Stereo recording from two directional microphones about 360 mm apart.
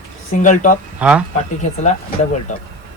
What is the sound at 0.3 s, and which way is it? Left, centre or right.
Speech, left.